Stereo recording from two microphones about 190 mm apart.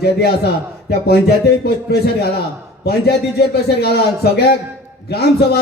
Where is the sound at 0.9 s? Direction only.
55° left (ahead or behind).